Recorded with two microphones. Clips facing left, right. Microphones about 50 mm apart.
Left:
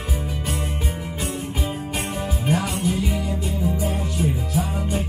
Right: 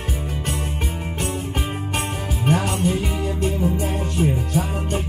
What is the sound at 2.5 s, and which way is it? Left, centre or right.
Music, right.